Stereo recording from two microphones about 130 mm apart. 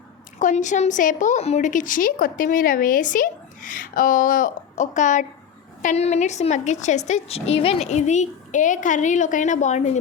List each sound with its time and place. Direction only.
0.3 s a woman's voice: 70° left (ahead or behind)
5.8 s a woman's voice: 60° left (ahead or behind)